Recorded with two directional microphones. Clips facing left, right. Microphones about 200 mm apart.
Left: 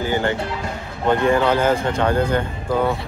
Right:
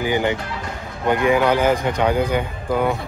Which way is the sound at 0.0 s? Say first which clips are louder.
Even; 15° right (ahead or behind).